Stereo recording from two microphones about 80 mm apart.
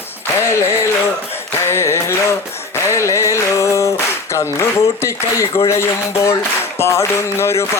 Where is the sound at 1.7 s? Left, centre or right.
Left.